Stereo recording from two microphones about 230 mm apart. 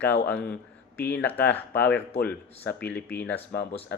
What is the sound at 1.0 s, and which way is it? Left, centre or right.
Speech, centre.